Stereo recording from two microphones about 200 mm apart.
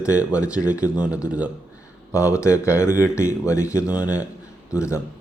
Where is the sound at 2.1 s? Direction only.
15° left (ahead or behind).